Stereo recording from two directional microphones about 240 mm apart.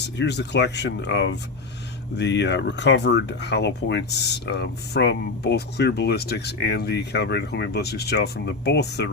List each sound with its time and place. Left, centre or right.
0.2 s speech: left